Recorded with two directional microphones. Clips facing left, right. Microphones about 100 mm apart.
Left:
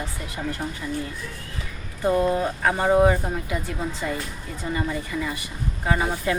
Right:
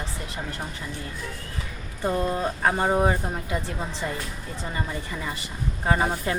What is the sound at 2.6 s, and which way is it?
Speech, 25° right (ahead or behind).